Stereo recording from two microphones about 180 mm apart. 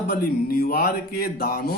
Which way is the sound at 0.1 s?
55° left (ahead or behind).